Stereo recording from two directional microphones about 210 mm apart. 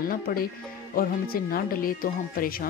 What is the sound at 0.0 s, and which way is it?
Speech, 45° left (ahead or behind).